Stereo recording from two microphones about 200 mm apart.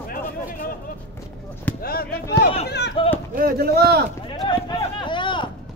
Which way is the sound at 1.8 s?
50° left (ahead or behind).